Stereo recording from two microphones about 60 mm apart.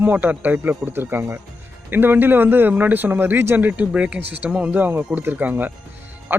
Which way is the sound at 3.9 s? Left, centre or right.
Centre.